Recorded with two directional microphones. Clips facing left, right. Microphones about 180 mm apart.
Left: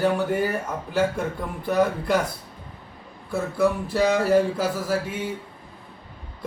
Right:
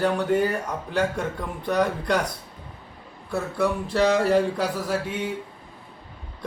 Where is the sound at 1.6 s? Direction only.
5° left (ahead or behind).